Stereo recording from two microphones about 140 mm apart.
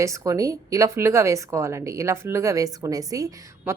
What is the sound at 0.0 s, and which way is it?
A woman's voice, 25° right (ahead or behind).